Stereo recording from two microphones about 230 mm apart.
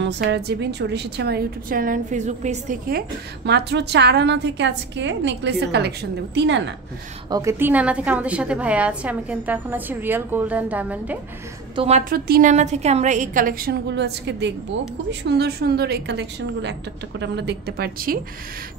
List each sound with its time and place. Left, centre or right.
0.0 s a woman's voice: right
3.4 s a woman's voice: right
7.2 s a woman's voice: centre
11.7 s a woman's voice: right